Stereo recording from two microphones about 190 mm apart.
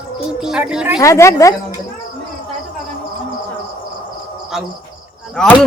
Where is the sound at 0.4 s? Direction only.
5° right (ahead or behind).